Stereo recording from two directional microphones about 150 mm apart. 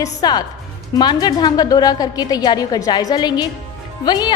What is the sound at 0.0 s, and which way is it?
A woman's voice, 25° left (ahead or behind).